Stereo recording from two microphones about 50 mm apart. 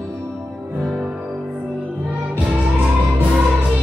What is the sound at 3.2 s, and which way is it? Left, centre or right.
Music, right.